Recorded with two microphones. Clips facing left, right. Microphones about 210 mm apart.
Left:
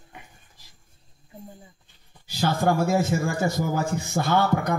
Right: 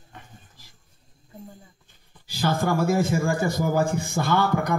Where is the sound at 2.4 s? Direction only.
55° right (ahead or behind).